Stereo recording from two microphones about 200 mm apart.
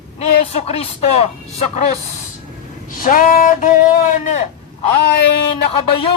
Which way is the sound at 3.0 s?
45° left (ahead or behind).